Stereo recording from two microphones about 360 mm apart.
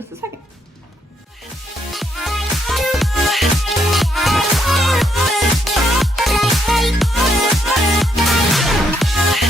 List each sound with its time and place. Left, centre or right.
0.1 s music: centre
1.9 s music: centre